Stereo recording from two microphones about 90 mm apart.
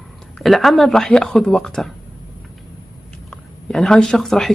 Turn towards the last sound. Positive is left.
turn(degrees=5)  # may be behind; listen again after turning